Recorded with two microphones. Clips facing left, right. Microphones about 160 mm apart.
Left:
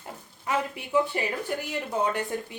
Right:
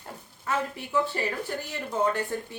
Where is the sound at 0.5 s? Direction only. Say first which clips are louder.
Left 1 dB; 15° left (ahead or behind).